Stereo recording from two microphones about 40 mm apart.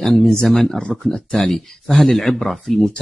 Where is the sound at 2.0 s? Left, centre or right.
Centre.